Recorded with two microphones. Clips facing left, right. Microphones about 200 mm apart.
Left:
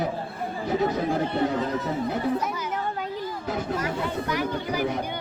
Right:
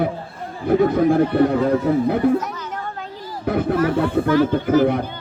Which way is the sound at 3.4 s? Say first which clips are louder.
Right 11 dB; 60° right (ahead or behind).